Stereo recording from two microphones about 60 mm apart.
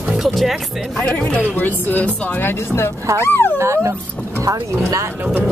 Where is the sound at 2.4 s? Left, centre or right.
Left.